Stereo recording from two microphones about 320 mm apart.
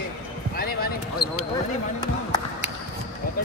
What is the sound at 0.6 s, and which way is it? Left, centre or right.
Basketball bounce, left.